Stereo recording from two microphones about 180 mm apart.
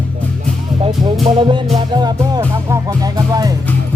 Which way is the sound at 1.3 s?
25° right (ahead or behind).